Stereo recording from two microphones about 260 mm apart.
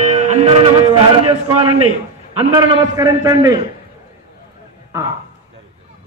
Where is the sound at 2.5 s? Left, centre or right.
Centre.